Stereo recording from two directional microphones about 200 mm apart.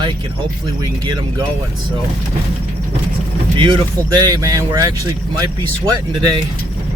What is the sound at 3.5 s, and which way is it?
Speech, 25° right (ahead or behind).